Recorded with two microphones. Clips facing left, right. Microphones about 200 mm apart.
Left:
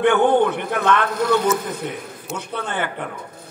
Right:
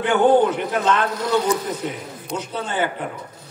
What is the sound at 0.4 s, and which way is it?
A man's voice, 55° left (ahead or behind).